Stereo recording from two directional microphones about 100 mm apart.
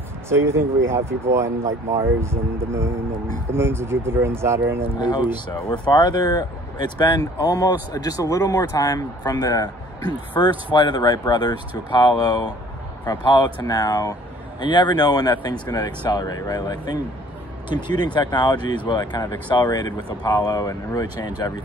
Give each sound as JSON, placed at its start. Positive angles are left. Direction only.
{"t": 0.3, "sound": "speech", "side_deg": -25}
{"t": 4.9, "sound": "speech", "side_deg": 50}
{"t": 10.3, "sound": "speech", "side_deg": 50}